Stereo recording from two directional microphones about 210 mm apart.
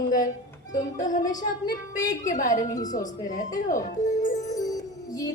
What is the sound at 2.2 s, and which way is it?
Speech, 40° left (ahead or behind).